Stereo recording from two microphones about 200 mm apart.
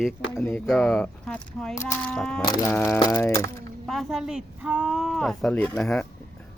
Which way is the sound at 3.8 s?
Centre (ahead or behind).